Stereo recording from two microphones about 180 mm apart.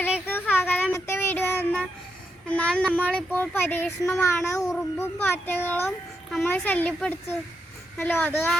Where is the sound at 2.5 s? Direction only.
5° left (ahead or behind).